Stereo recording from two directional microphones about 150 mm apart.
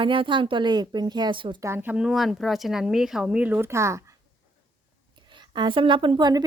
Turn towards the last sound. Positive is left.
turn(degrees=-30)  # may be behind; listen again after turning